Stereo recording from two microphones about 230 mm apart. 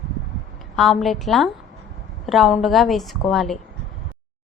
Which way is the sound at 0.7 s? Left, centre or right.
Centre.